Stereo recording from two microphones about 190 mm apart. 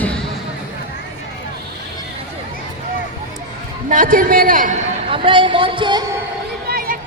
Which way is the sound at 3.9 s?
45° right (ahead or behind).